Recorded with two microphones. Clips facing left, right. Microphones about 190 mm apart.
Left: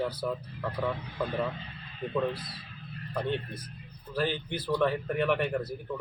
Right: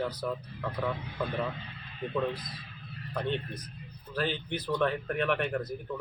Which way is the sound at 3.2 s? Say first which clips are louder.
Left 1 dB; 10° left (ahead or behind).